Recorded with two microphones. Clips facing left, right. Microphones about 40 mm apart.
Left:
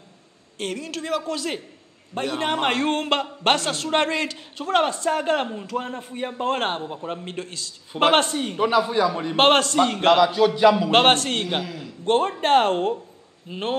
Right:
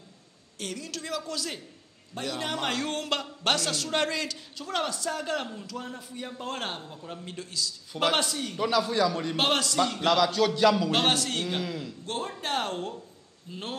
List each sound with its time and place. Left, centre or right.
0.6 s a man's voice: left
9.4 s a man's voice: left
10.1 s a man's voice: left
10.9 s a man's voice: left
11.6 s a man's voice: centre
12.0 s a man's voice: left